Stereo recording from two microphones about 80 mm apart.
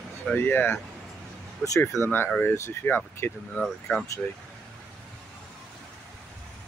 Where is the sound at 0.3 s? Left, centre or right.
Left.